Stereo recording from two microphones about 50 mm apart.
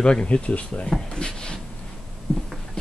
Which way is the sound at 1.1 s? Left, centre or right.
Centre.